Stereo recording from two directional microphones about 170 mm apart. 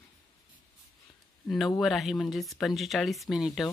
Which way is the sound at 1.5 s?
5° left (ahead or behind).